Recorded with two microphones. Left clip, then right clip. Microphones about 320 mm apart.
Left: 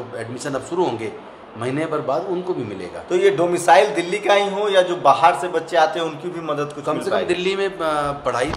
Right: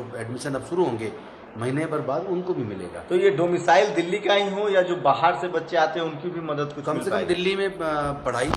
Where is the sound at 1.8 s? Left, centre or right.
Centre.